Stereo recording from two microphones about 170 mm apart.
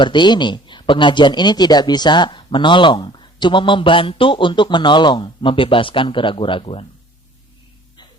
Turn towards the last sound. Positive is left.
turn(degrees=35)  # may be behind; listen again after turning